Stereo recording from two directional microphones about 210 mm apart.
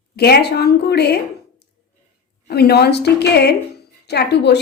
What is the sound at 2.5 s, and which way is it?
A woman's voice, 50° left (ahead or behind).